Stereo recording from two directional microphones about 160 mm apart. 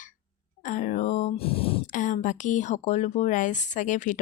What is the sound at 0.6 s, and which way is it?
Speech, 50° left (ahead or behind).